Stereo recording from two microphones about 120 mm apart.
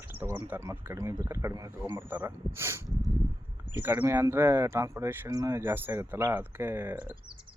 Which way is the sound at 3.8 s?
15° right (ahead or behind).